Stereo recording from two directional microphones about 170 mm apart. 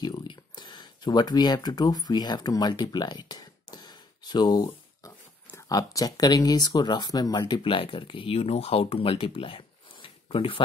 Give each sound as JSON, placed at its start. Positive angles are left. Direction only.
{"t": 0.0, "sound": "speech", "side_deg": 25}